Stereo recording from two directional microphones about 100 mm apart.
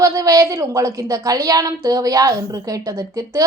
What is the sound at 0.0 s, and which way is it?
A woman's voice, 35° right (ahead or behind).